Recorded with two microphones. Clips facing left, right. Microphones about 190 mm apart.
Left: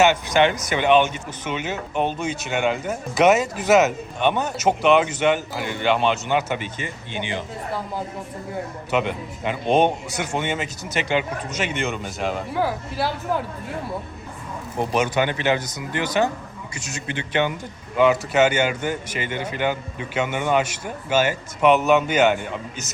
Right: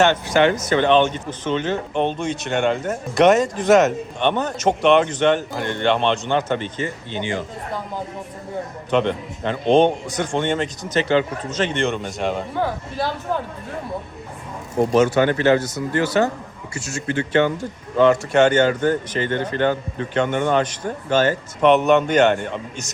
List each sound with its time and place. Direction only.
0.0 s speech: 15° left (ahead or behind)
8.9 s speech: 5° left (ahead or behind)
14.9 s speech: 15° left (ahead or behind)
17.9 s speech: 5° left (ahead or behind)